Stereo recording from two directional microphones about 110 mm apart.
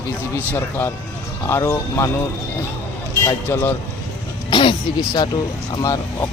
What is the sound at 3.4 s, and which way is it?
Speech, 20° left (ahead or behind).